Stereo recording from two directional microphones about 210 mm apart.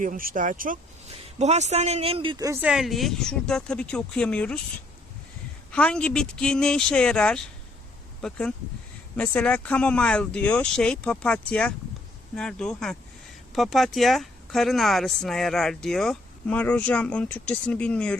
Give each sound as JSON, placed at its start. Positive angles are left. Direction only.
{"t": 0.0, "sound": "speech", "side_deg": -40}
{"t": 2.6, "sound": "speech", "side_deg": 0}
{"t": 5.7, "sound": "speech", "side_deg": 5}